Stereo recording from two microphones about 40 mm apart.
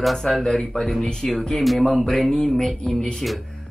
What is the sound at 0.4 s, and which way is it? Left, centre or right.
Speech, centre.